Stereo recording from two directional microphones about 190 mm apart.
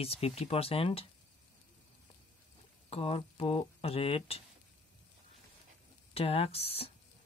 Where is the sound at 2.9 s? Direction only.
30° left (ahead or behind).